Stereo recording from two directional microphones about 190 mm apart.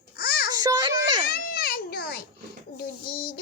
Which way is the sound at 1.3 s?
55° left (ahead or behind).